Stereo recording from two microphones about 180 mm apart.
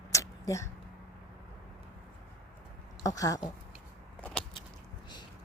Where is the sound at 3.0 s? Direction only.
20° left (ahead or behind).